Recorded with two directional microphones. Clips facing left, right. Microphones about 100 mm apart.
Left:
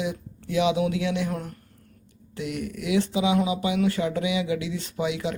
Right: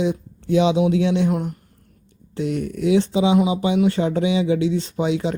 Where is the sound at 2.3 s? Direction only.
30° right (ahead or behind).